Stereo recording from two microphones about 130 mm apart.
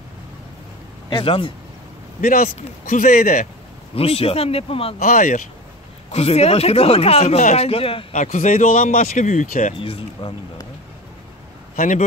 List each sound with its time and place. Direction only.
1.1 s speech: 40° left (ahead or behind)
2.2 s a man's voice: 90° left
3.9 s speech: 50° left (ahead or behind)
4.9 s a man's voice: 85° left
6.1 s speech: 55° left (ahead or behind)
8.1 s speech: 65° left (ahead or behind)
9.8 s speech: 45° left (ahead or behind)
11.7 s speech: 90° left